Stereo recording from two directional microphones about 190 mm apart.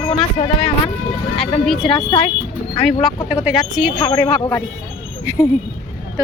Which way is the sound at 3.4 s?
5° right (ahead or behind).